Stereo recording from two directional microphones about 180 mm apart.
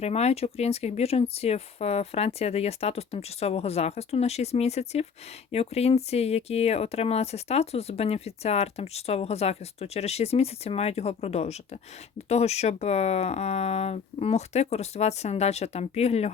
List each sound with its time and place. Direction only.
0.0 s speech: 35° left (ahead or behind)